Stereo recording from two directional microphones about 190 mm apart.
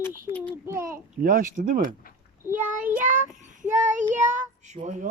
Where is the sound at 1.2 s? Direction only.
45° right (ahead or behind).